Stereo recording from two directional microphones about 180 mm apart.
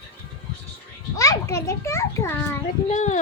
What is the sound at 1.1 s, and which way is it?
A child's voice, 15° left (ahead or behind).